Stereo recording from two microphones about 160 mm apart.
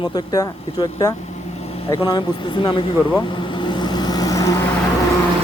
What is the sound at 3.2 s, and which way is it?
Vehicle, 30° left (ahead or behind).